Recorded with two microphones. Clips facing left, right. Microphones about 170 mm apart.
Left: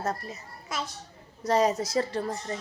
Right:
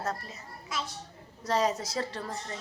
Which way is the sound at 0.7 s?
45° left (ahead or behind).